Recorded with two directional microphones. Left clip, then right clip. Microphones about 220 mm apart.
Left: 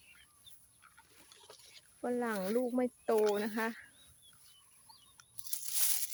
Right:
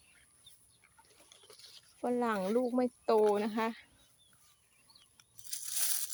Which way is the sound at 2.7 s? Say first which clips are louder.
Right 2 dB; 10° right (ahead or behind).